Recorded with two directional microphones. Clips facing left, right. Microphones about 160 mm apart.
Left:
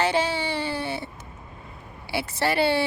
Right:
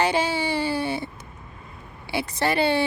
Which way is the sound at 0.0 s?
10° right (ahead or behind).